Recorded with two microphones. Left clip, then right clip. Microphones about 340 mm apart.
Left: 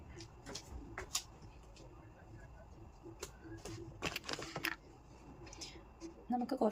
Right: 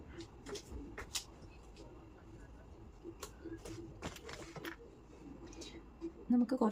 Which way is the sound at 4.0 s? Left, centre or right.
Left.